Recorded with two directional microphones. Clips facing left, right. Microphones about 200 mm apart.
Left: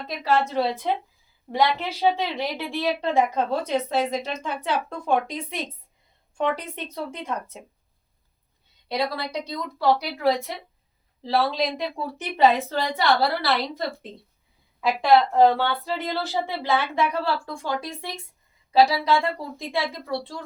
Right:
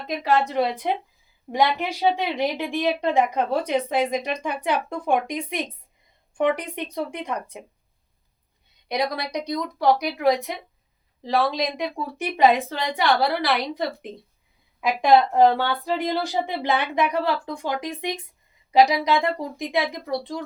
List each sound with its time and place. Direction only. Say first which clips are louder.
0.5 s a woman's voice: right 1 dB; 15° right (ahead or behind)
8.9 s a woman's voice: right 1 dB; 15° right (ahead or behind)